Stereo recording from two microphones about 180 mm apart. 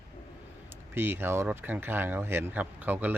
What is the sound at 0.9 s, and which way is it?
Speech, 10° right (ahead or behind).